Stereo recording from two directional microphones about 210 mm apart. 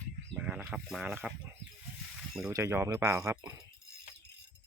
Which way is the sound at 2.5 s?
15° right (ahead or behind).